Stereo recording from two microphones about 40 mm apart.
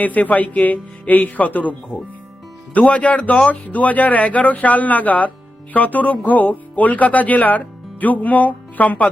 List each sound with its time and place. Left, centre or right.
0.0 s speech: left